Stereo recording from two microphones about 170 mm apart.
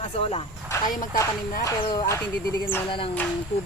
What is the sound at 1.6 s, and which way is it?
Speech, 20° left (ahead or behind).